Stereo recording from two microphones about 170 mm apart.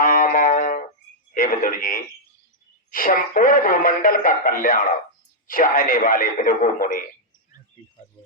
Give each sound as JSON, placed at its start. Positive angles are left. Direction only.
{"t": 0.0, "sound": "music", "side_deg": 55}
{"t": 1.3, "sound": "a sound", "side_deg": 55}
{"t": 2.9, "sound": "speech", "side_deg": 55}